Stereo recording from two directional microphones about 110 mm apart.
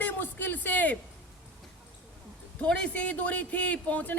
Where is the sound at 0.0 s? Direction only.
15° left (ahead or behind).